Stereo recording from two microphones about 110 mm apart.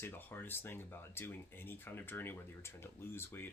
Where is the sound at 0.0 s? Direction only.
20° left (ahead or behind).